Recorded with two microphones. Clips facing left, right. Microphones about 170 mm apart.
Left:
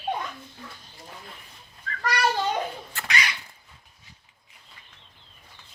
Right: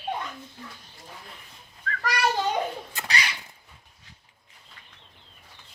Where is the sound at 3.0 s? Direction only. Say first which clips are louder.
Right 1 dB; 20° right (ahead or behind).